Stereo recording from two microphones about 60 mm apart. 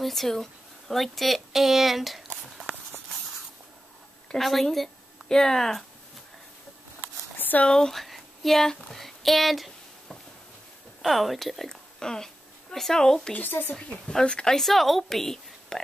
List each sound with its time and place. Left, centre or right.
0.0 s speech: centre
4.4 s speech: centre
7.3 s a sound: left
7.6 s speech: centre
11.0 s a woman's voice: centre
13.3 s speech: left
13.7 s a woman's voice: centre